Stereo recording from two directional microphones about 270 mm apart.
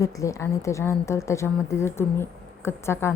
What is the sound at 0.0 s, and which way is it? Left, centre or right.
A woman's voice, centre.